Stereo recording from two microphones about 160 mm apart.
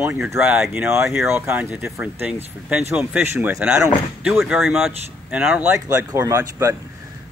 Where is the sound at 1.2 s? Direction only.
15° right (ahead or behind).